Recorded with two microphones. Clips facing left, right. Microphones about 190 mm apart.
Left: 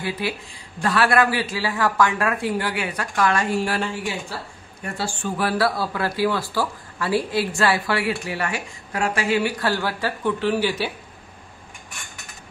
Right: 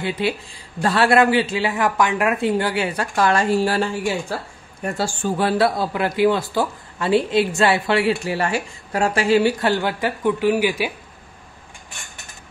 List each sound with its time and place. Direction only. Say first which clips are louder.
0.2 s a man's voice: right 5 dB; 25° right (ahead or behind); by 5.3 s 45° right (ahead or behind)
5.4 s a man's voice: right 3 dB; 25° right (ahead or behind)